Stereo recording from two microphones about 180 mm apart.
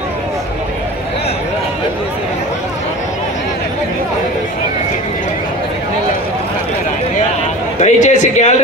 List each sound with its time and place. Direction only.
7.8 s a man's voice: 40° left (ahead or behind)